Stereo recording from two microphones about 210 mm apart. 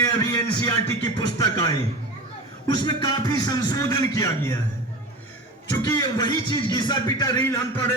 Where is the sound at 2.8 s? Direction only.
20° left (ahead or behind).